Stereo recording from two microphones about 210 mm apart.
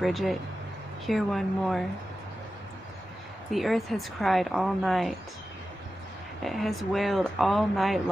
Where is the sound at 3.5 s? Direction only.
Centre (ahead or behind).